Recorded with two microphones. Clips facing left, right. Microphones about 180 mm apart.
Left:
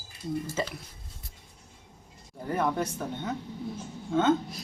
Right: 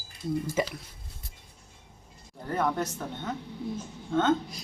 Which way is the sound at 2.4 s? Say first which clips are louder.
Even; 10° left (ahead or behind).